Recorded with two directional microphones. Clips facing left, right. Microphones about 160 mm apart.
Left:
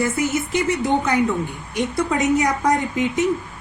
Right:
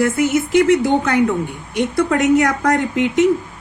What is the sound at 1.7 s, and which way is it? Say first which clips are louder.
Speech: right 4 dB; 65° right (ahead or behind).